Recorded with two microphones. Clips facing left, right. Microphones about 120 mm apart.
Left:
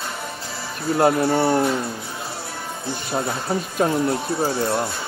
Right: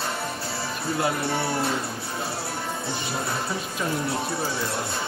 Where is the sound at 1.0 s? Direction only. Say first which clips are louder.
Left 10 dB; 55° left (ahead or behind).